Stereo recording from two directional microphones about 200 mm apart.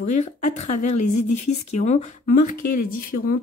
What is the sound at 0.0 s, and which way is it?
Speech, 35° left (ahead or behind).